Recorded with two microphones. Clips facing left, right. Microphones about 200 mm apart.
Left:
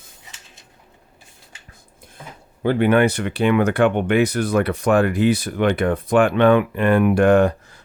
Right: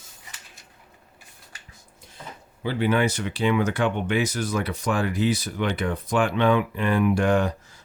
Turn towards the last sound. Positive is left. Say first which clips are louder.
# left 7 dB
turn(degrees=55)  # may be behind; listen again after turning